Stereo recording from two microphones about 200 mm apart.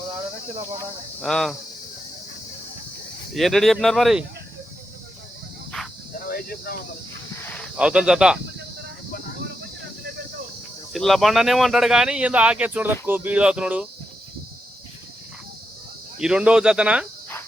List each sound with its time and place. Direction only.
1.2 s speech: centre (ahead or behind)
3.3 s speech: centre (ahead or behind)
6.2 s cricket: 50° left (ahead or behind)
7.5 s speech: centre (ahead or behind)
10.9 s speech: centre (ahead or behind)
16.1 s speech: 5° right (ahead or behind)